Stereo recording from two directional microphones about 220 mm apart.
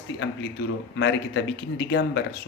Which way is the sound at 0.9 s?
55° left (ahead or behind).